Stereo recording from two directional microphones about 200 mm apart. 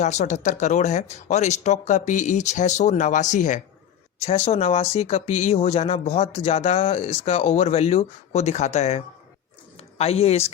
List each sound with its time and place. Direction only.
0.0 s speech: 35° left (ahead or behind)